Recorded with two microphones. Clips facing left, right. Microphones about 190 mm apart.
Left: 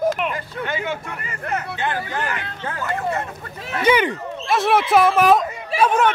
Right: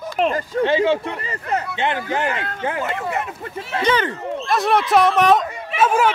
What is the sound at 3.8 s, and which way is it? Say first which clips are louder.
Speech: left 2 dB; 10° left (ahead or behind).